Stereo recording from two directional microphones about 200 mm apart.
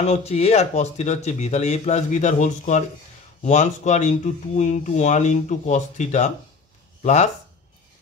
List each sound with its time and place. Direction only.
0.0 s speech: 35° left (ahead or behind)